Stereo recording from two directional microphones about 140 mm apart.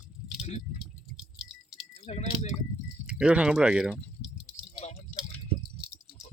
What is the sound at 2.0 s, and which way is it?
Speech, 50° left (ahead or behind).